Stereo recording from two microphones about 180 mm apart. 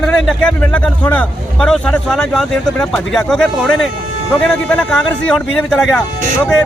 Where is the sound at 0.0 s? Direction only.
5° left (ahead or behind).